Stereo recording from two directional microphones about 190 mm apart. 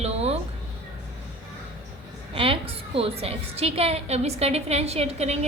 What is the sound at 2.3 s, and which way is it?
A woman's voice, 30° right (ahead or behind).